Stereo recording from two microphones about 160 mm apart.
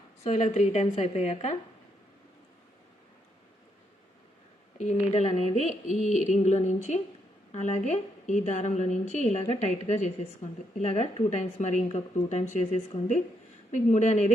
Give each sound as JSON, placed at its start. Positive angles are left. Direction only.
{"t": 0.3, "sound": "speech", "side_deg": 45}
{"t": 4.8, "sound": "speech", "side_deg": 45}